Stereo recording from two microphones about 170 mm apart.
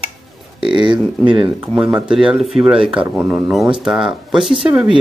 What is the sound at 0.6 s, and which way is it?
Speech, 30° right (ahead or behind).